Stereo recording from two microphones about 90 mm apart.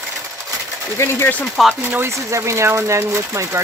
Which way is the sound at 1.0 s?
30° left (ahead or behind).